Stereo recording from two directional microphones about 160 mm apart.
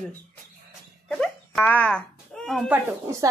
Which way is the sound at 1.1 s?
5° left (ahead or behind).